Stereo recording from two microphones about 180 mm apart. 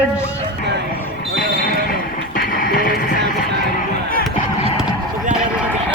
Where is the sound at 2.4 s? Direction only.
55° left (ahead or behind).